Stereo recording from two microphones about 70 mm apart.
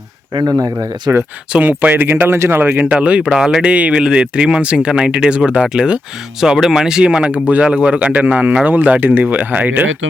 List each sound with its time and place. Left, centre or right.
0.3 s speech: right
1.5 s speech: right; by 3.6 s centre
3.6 s speech: centre